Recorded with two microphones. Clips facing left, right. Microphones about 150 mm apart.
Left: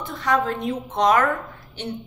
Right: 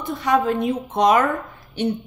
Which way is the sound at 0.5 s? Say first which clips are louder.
Right 5 dB; 15° right (ahead or behind).